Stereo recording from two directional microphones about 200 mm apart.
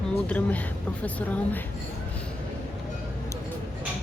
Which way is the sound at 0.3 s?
5° left (ahead or behind).